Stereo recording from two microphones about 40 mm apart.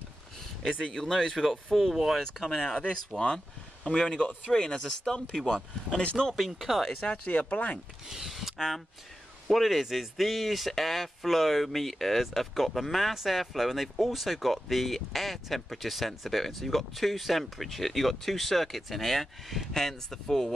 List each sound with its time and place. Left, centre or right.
0.7 s speech: left
1.0 s speech: centre
3.2 s speech: left
4.5 s speech: centre
6.3 s speech: centre
7.0 s speech: left
8.1 s speech: centre